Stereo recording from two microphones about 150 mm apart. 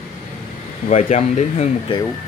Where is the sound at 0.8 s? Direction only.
50° left (ahead or behind).